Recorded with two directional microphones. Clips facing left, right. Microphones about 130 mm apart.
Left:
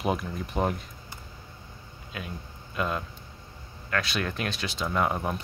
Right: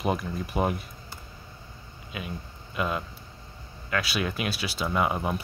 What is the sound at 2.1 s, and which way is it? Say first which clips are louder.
Speech: right 2 dB; 5° right (ahead or behind).